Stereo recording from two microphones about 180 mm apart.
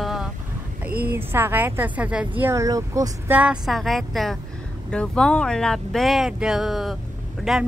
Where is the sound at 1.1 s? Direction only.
15° right (ahead or behind).